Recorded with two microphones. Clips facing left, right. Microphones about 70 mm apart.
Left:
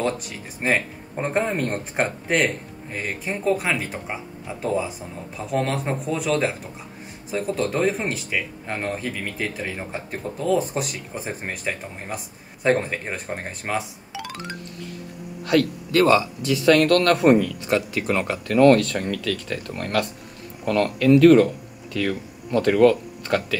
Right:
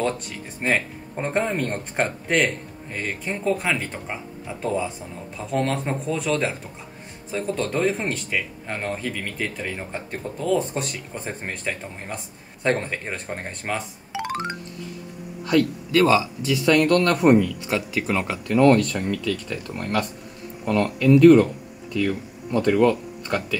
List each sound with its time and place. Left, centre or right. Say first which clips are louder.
0.6 s speech: left 1 dB; centre
14.1 s music: right 6 dB; right
15.4 s a man's voice: even; left